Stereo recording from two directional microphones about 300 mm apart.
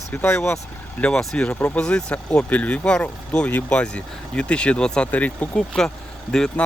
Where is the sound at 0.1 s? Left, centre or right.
Centre.